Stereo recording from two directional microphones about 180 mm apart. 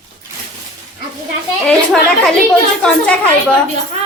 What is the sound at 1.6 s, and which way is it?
Speech, 5° left (ahead or behind).